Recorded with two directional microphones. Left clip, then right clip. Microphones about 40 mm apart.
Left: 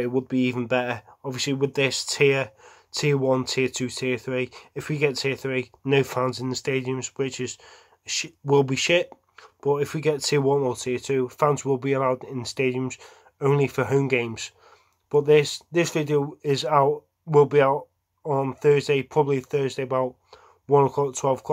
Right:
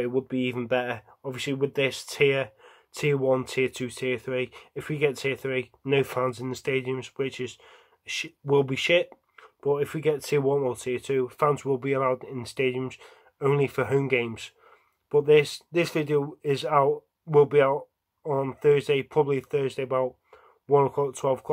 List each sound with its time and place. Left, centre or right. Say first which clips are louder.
0.3 s speech: left 3 dB; left
6.6 s speech: even; centre; by 10.7 s left
10.7 s speech: left 2 dB; left
11.2 s speech: left 3 dB; centre
15.7 s speech: left 2 dB; centre
16.2 s speech: left 2 dB; centre
20.2 s speech: left 2 dB; left